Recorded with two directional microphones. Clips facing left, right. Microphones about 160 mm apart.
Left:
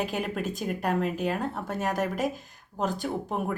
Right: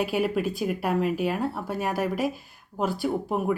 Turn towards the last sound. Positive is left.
turn(degrees=-5)  # may be behind; listen again after turning